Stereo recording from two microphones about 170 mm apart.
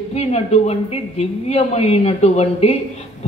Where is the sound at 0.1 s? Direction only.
40° left (ahead or behind).